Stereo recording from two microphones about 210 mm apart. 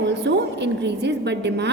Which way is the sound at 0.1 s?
55° right (ahead or behind).